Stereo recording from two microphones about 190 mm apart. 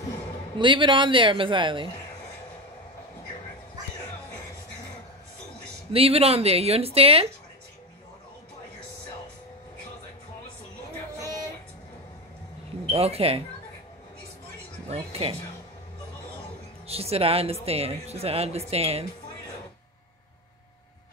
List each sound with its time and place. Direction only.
0.6 s a man's voice: 25° right (ahead or behind)
5.9 s speech: 30° right (ahead or behind)
12.9 s speech: 30° right (ahead or behind)
14.9 s speech: 30° right (ahead or behind)
16.8 s speech: 30° right (ahead or behind)